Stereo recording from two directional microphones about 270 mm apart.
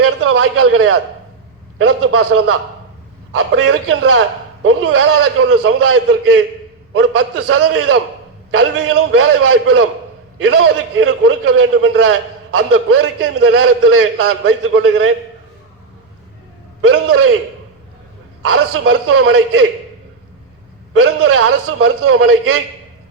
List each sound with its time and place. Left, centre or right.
0.0 s a sound: right
1.8 s a man's voice: right
16.9 s a man's voice: right
18.5 s a man's voice: right
21.0 s a man's voice: right